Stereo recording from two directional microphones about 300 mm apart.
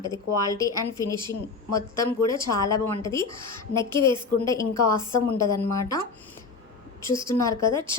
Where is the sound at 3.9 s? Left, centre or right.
Centre.